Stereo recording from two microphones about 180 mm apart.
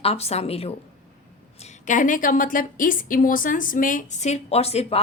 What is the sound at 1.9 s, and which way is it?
A woman's voice, 45° left (ahead or behind).